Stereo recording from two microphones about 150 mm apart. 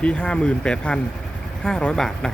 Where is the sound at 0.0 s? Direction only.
5° left (ahead or behind).